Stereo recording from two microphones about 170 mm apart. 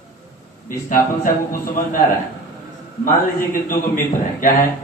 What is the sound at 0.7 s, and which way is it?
Speech, 50° left (ahead or behind).